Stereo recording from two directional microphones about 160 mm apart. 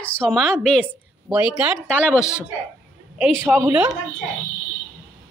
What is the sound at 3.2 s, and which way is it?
Speech, 10° right (ahead or behind).